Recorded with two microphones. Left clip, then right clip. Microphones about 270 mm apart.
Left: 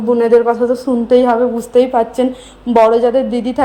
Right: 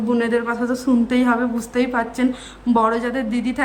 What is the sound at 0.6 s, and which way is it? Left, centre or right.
Speech, centre.